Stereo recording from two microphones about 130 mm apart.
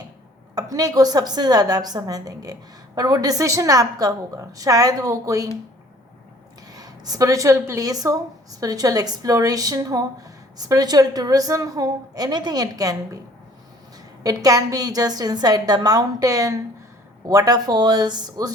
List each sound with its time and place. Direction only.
0.5 s a woman's voice: 30° right (ahead or behind)
6.7 s a woman's voice: 30° right (ahead or behind)
14.3 s a woman's voice: 30° right (ahead or behind)